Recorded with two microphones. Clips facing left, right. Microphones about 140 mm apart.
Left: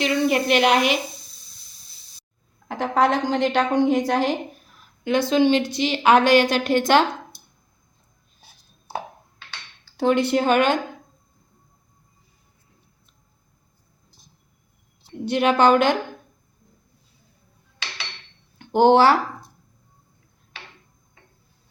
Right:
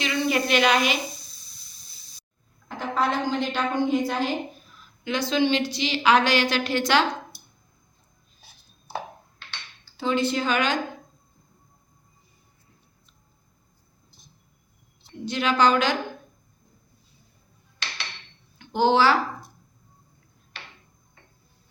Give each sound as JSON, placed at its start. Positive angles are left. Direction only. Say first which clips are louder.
{"t": 0.0, "sound": "a woman's voice", "louder": "left 4 dB", "side_deg": 60}
{"t": 2.6, "sound": "a woman's voice", "louder": "left 6 dB", "side_deg": 80}
{"t": 5.0, "sound": "a woman's voice", "louder": "left 5 dB", "side_deg": 50}
{"t": 10.0, "sound": "a woman's voice", "louder": "left 5 dB", "side_deg": 65}
{"t": 15.2, "sound": "a woman's voice", "louder": "left 4 dB", "side_deg": 60}
{"t": 18.6, "sound": "speech", "louder": "left 5 dB", "side_deg": 60}